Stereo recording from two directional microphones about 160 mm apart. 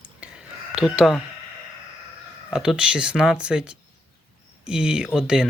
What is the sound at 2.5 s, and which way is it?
Speech, 5° right (ahead or behind).